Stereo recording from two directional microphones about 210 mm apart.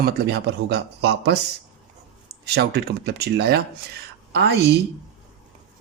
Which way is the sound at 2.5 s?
50° right (ahead or behind).